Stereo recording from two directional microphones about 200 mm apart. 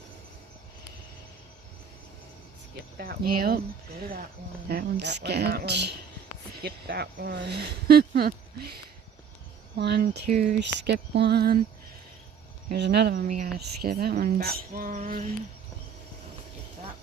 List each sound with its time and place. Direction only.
3.0 s speech: 50° right (ahead or behind)
4.7 s speech: 55° right (ahead or behind)
9.7 s speech: 55° right (ahead or behind)
10.8 s speech: 60° right (ahead or behind)
12.7 s speech: 55° right (ahead or behind)